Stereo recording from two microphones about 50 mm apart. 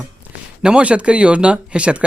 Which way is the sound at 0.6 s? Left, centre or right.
Centre.